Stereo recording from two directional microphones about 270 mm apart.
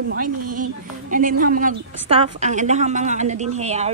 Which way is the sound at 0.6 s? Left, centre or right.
Right.